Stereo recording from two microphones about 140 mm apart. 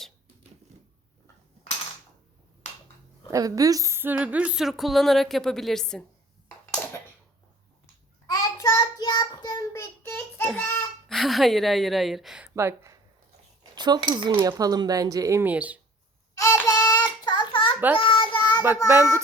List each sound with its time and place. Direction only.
3.3 s speech: 25° right (ahead or behind); by 6.1 s 5° left (ahead or behind)
8.3 s child singing: 25° left (ahead or behind)
10.0 s child singing: 15° left (ahead or behind)
11.1 s speech: centre (ahead or behind)
12.5 s speech: 20° right (ahead or behind)
13.7 s speech: 30° right (ahead or behind); by 15.8 s 10° right (ahead or behind)
16.4 s child singing: 20° left (ahead or behind)